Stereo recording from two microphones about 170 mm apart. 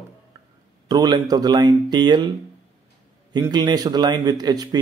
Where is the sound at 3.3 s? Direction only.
25° right (ahead or behind).